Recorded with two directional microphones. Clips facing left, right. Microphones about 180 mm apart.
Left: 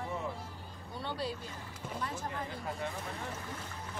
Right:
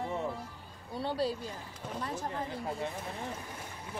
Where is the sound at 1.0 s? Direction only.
35° right (ahead or behind).